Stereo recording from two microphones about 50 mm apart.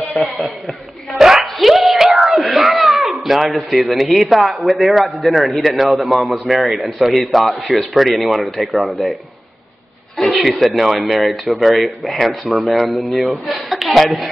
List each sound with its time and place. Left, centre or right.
0.2 s a man's voice: centre
1.1 s a sound: centre
4.6 s a man's voice: centre
10.4 s speech: centre